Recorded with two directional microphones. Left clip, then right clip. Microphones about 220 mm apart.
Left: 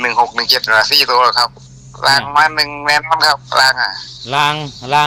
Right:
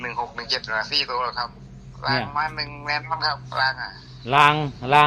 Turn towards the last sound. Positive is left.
turn(degrees=35)  # may be behind; listen again after turning